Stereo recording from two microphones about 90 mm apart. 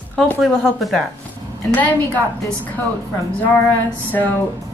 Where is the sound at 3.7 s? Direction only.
20° left (ahead or behind).